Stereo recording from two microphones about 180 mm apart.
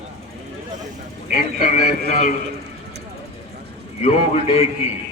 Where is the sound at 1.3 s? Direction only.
45° left (ahead or behind).